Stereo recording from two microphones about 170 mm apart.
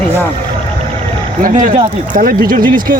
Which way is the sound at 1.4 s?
50° right (ahead or behind).